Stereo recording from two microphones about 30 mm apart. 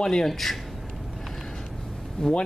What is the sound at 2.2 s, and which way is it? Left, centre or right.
Speech, left.